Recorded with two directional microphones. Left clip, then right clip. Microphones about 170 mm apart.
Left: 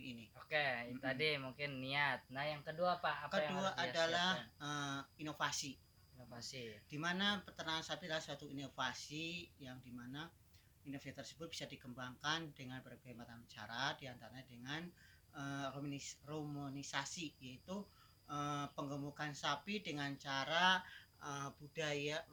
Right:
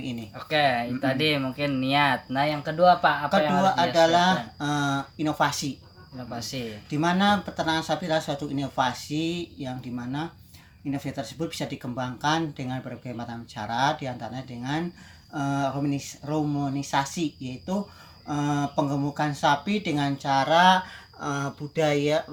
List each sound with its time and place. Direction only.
0.3 s speech: 35° left (ahead or behind)
3.6 s speech: 5° right (ahead or behind)
6.3 s speech: 40° left (ahead or behind)
6.9 s speech: 5° right (ahead or behind)